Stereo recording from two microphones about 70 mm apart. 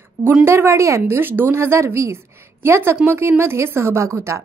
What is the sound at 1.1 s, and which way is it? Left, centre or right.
A woman's voice, right.